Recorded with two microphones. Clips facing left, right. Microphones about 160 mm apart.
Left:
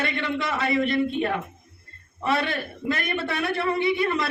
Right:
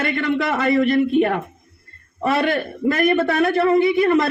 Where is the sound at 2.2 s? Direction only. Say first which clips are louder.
Right 6 dB; 45° right (ahead or behind).